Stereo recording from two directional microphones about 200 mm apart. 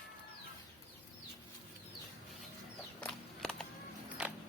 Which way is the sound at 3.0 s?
5° left (ahead or behind).